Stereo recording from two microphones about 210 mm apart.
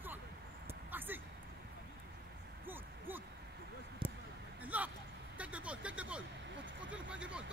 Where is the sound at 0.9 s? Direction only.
10° right (ahead or behind).